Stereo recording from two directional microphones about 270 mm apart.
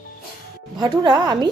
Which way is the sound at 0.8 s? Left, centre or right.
Centre.